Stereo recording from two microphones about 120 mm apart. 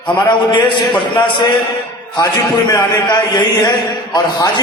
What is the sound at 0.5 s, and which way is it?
Speech, 40° left (ahead or behind).